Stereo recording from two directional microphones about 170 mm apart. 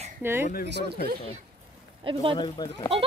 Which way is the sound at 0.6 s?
80° right.